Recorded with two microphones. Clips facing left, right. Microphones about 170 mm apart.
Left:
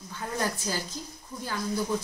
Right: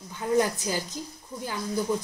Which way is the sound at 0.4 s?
15° right (ahead or behind).